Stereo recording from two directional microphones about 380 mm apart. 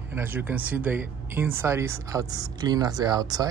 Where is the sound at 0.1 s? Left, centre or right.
Centre.